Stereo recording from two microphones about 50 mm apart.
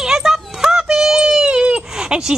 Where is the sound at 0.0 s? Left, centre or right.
Centre.